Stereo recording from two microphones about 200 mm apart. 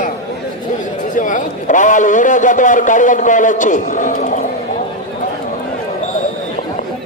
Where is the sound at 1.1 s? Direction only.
40° left (ahead or behind).